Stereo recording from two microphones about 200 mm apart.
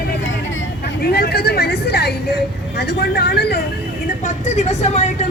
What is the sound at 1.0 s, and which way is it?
Speech, 50° left (ahead or behind).